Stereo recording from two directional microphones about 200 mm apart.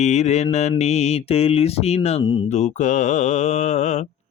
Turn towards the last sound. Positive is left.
turn(degrees=35)  # may be behind; listen again after turning